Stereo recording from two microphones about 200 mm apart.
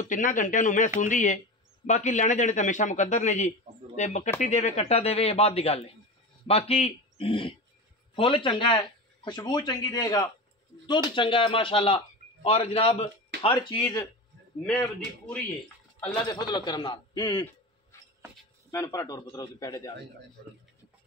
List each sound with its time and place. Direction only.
0.1 s a man's voice: 40° left (ahead or behind); by 14.0 s 20° left (ahead or behind)
14.7 s a man's voice: 10° left (ahead or behind)
16.3 s speech: 20° left (ahead or behind)
17.9 s a sound: 15° left (ahead or behind)
18.7 s a man's voice: 15° left (ahead or behind)